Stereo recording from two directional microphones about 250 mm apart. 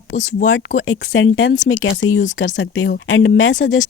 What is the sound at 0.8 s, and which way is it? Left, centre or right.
A woman's voice, left.